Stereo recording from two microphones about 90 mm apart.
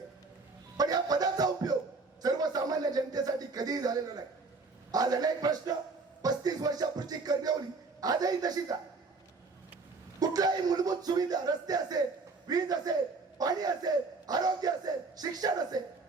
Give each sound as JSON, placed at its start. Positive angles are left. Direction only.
{"t": 0.8, "sound": "music", "side_deg": -45}
{"t": 2.2, "sound": "a sound", "side_deg": -45}
{"t": 4.9, "sound": "a man's voice", "side_deg": -45}
{"t": 10.2, "sound": "a man's voice", "side_deg": -45}